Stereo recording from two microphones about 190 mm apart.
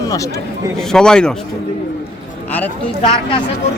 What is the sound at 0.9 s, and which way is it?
Speech, 5° left (ahead or behind).